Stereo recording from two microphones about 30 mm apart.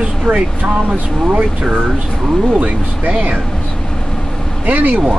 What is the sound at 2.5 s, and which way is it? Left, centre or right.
Speech, right.